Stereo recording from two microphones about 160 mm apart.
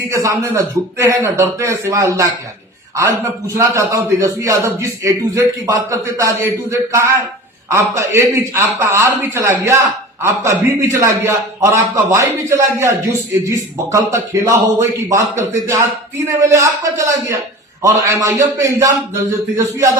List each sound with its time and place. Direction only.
0.1 s a man's voice: 20° right (ahead or behind)
3.6 s a man's voice: 20° right (ahead or behind)